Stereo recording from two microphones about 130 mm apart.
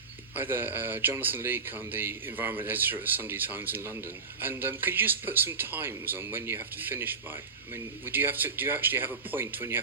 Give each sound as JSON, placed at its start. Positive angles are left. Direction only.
{"t": 0.3, "sound": "speech", "side_deg": -15}